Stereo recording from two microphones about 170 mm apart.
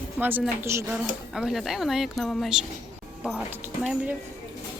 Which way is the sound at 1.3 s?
Centre (ahead or behind).